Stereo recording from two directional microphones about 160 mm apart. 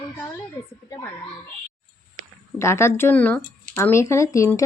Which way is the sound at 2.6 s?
15° left (ahead or behind).